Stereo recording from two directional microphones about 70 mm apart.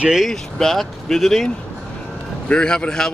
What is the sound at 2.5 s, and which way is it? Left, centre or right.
Speech, centre.